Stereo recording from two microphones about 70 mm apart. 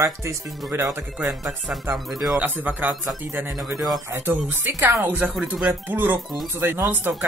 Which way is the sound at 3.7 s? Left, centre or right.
Centre.